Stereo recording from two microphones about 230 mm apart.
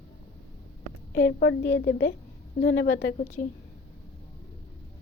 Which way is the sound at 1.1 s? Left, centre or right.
Left.